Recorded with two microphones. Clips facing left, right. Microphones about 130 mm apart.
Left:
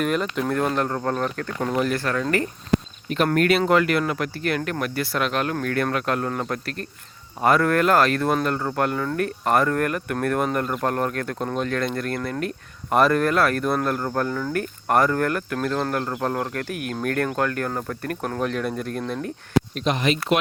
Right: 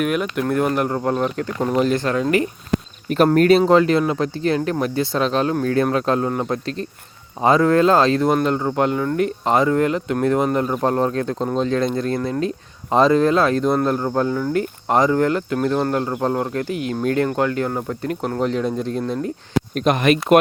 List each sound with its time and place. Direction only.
0.0 s speech: 5° right (ahead or behind)
3.3 s speech: 35° right (ahead or behind)
6.2 s speech: 15° right (ahead or behind)
16.6 s speech: 75° left (ahead or behind)
16.9 s speech: 15° right (ahead or behind)
19.7 s speech: 55° right (ahead or behind)